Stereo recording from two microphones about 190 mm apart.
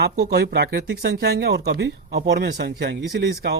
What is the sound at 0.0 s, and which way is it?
A woman's voice, 60° right (ahead or behind).